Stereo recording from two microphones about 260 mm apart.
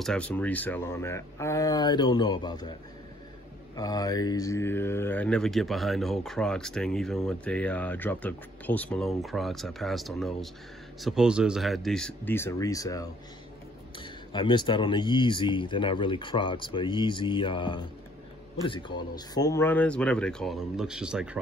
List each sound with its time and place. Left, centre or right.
0.0 s speech: centre
3.7 s speech: centre